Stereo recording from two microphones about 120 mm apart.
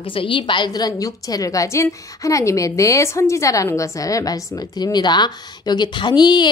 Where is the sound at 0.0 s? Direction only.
45° left (ahead or behind).